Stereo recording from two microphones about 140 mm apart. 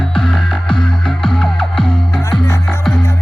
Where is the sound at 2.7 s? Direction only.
Centre (ahead or behind).